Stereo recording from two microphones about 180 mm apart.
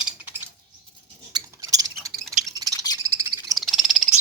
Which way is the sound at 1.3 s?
20° right (ahead or behind).